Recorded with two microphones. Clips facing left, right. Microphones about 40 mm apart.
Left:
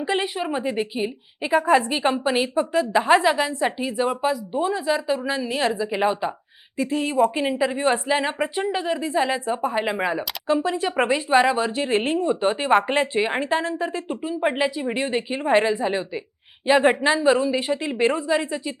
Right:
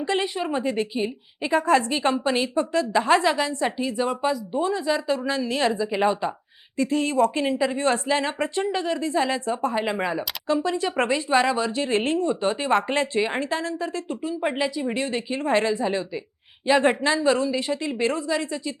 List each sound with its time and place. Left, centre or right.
0.0 s speech: centre